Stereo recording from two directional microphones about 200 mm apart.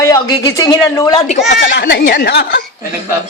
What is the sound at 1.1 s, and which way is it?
Speech, 35° left (ahead or behind).